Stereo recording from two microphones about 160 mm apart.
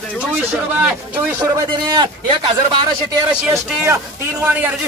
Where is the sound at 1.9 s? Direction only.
30° right (ahead or behind).